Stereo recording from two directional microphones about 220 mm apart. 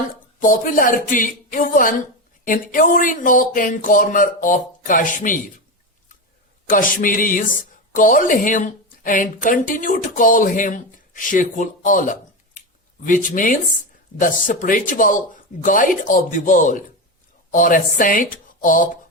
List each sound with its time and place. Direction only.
0.3 s speech: 35° left (ahead or behind)
6.7 s speech: 40° left (ahead or behind)